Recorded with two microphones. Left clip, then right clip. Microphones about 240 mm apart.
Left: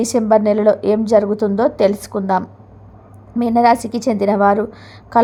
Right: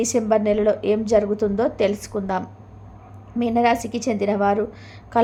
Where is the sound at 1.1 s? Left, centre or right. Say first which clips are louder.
Left 5 dB; centre.